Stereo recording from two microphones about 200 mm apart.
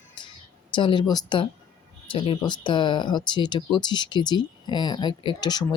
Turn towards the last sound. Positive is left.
turn(degrees=20)  # may be behind; listen again after turning